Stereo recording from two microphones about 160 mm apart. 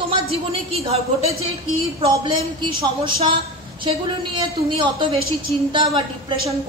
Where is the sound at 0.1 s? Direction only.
35° right (ahead or behind).